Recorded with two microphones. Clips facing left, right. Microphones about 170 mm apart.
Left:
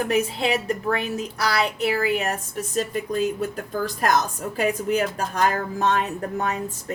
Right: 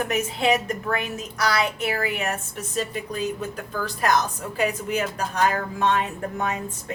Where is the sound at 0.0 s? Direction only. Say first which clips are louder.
Left 1 dB; 35° left (ahead or behind).